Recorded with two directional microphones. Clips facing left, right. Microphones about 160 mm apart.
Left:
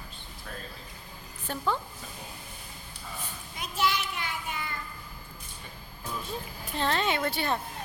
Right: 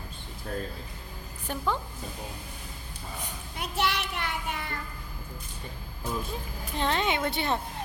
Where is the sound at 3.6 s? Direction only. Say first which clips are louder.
Even; 65° right (ahead or behind).